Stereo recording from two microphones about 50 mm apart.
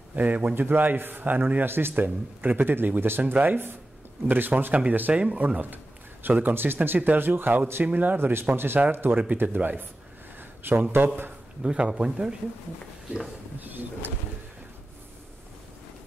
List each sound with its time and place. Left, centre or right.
0.1 s a man's voice: right
5.1 s speech: right
5.4 s a man's voice: right
7.8 s a man's voice: right
8.5 s a man's voice: right
10.6 s speech: right
11.6 s speech: right
13.6 s a man's voice: right